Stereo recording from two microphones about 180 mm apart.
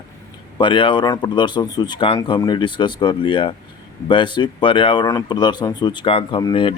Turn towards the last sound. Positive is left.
turn(degrees=25)  # may be behind; listen again after turning